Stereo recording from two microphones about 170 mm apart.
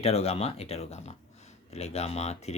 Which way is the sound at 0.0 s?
35° left (ahead or behind).